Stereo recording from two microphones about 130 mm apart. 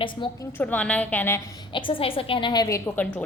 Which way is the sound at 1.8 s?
40° left (ahead or behind).